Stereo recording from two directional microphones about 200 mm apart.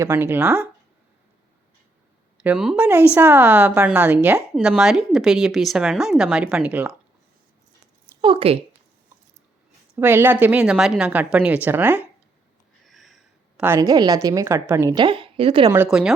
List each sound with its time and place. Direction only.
0.0 s a woman's voice: 15° right (ahead or behind)
2.4 s a woman's voice: 5° right (ahead or behind)
8.2 s speech: 25° right (ahead or behind)
9.9 s a woman's voice: 10° right (ahead or behind)
12.8 s a sound: centre (ahead or behind)
13.7 s a woman's voice: 15° right (ahead or behind)
15.7 s a woman's voice: 5° right (ahead or behind)